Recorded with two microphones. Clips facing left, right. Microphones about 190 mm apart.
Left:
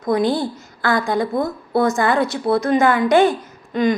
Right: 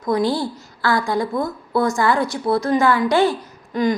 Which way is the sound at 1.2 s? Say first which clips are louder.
Left 2 dB; 55° left (ahead or behind).